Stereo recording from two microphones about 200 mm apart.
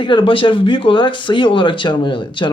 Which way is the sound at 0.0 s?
25° left (ahead or behind).